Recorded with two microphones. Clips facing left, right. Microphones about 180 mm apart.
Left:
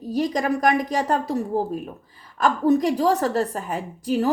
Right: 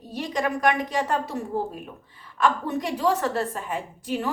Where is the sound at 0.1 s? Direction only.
40° left (ahead or behind).